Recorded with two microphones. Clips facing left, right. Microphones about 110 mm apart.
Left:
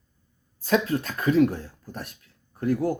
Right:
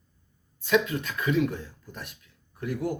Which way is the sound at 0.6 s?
35° left (ahead or behind).